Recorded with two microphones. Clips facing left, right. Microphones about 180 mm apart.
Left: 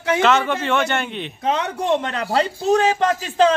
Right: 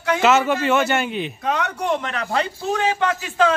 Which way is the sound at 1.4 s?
25° left (ahead or behind).